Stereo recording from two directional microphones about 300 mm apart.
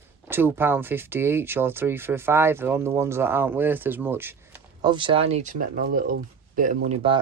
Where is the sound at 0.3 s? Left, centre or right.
Centre.